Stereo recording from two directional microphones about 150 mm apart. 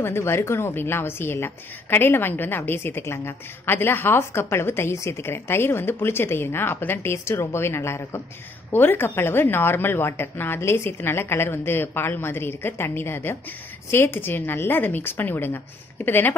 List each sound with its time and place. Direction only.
0.0 s a woman's voice: 15° left (ahead or behind)